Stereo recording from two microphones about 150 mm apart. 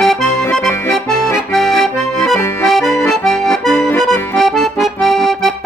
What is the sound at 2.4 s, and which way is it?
Accordion, 15° left (ahead or behind).